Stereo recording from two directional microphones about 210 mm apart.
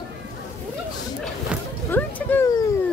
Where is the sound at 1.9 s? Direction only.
10° left (ahead or behind).